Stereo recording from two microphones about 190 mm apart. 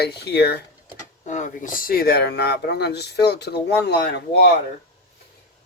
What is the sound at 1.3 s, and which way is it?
Speech, 40° left (ahead or behind).